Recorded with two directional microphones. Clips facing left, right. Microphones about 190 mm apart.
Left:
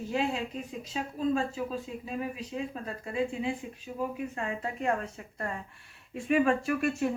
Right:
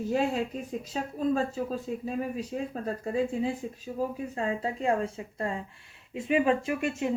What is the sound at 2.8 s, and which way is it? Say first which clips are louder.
Speech: right 6 dB; 45° right (ahead or behind).